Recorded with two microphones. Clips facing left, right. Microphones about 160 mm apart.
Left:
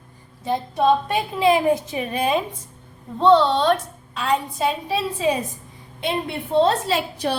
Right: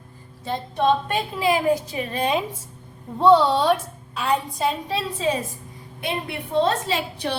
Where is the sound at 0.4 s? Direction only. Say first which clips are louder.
Left 2 dB; 15° left (ahead or behind).